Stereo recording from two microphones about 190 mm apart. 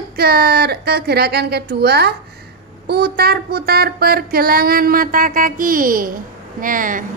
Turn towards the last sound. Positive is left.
turn(degrees=-45)  # may be behind; listen again after turning